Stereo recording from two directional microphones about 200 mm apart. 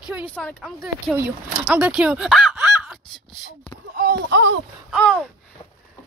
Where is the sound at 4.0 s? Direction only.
55° right (ahead or behind).